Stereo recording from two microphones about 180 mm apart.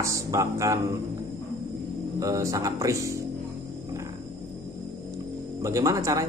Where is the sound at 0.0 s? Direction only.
15° right (ahead or behind).